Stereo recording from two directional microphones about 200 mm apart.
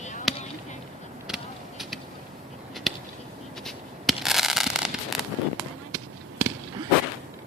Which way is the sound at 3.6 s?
Centre (ahead or behind).